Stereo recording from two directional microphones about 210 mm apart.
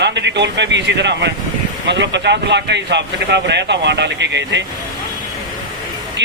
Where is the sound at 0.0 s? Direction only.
55° right (ahead or behind).